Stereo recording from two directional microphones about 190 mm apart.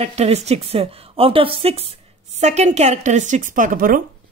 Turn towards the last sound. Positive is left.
turn(degrees=-50)  # may be behind; listen again after turning